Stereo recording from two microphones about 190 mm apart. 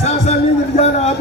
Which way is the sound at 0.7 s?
35° left (ahead or behind).